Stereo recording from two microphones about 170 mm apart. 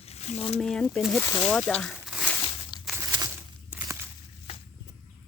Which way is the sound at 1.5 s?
5° left (ahead or behind).